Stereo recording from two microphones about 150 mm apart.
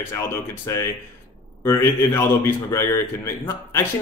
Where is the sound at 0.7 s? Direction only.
20° left (ahead or behind).